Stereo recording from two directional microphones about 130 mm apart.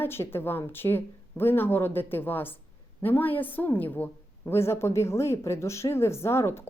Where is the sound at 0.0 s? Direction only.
15° left (ahead or behind).